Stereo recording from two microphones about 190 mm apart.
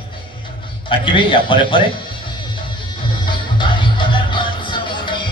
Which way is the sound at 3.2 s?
25° left (ahead or behind).